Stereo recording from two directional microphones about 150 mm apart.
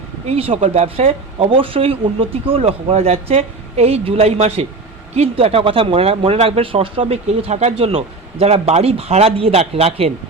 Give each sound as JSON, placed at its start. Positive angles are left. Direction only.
{"t": 0.3, "sound": "speech", "side_deg": -40}